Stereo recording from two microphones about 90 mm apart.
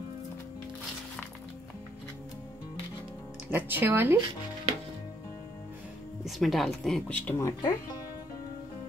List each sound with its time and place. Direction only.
3.4 s speech: 25° right (ahead or behind)
6.2 s speech: centre (ahead or behind)
7.1 s speech: 15° left (ahead or behind)
7.3 s speech: 30° left (ahead or behind)